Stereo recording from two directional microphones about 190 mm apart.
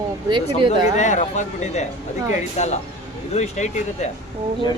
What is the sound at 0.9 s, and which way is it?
Speech, 40° left (ahead or behind).